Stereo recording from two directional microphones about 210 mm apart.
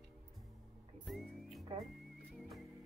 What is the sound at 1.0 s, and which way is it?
Music, centre (ahead or behind).